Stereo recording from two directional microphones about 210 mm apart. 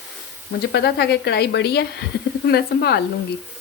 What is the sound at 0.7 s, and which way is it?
A woman's voice, 50° left (ahead or behind).